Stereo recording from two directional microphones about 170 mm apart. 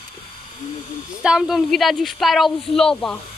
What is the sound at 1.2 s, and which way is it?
Speech, 5° right (ahead or behind).